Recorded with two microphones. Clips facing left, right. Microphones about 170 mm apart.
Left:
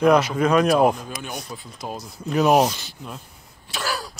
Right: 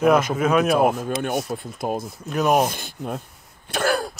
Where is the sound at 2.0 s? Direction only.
Centre (ahead or behind).